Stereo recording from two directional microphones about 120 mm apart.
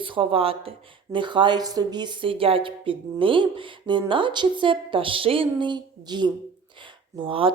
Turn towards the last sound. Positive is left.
turn(degrees=-45)  # may be behind; listen again after turning